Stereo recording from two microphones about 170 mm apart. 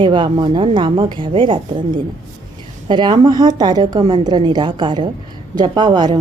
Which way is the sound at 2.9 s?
25° right (ahead or behind).